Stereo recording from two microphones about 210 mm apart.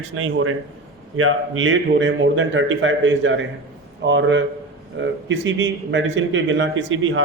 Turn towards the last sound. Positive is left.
turn(degrees=-70)  # may be behind; listen again after turning